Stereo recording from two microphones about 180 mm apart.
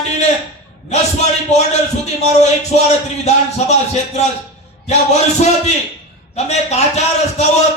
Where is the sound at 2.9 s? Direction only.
40° left (ahead or behind).